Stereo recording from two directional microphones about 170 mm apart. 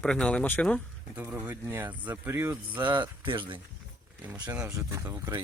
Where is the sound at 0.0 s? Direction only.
5° left (ahead or behind).